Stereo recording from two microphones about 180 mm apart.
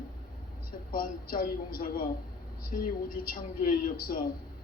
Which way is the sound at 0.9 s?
55° left (ahead or behind).